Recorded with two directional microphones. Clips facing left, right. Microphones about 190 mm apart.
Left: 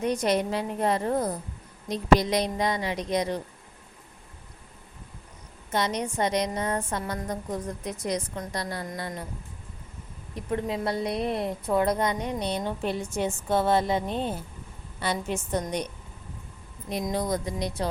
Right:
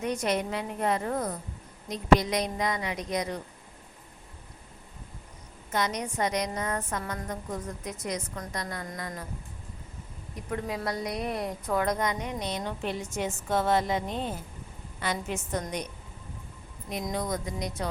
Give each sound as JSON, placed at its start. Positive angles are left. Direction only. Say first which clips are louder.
{"t": 0.0, "sound": "a woman's voice", "louder": "left 4 dB", "side_deg": 35}
{"t": 5.7, "sound": "a woman's voice", "louder": "left 3 dB", "side_deg": 30}
{"t": 10.3, "sound": "a woman's voice", "louder": "left 4 dB", "side_deg": 25}
{"t": 16.9, "sound": "a woman's voice", "louder": "left 4 dB", "side_deg": 35}